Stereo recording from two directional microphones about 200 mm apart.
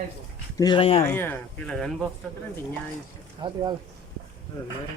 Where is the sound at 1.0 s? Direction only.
10° left (ahead or behind).